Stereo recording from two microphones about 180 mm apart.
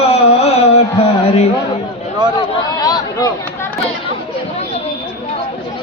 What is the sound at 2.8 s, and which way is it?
Chatter, 20° left (ahead or behind).